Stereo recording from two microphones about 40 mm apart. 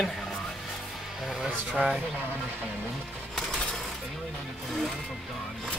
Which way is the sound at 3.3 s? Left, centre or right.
Centre.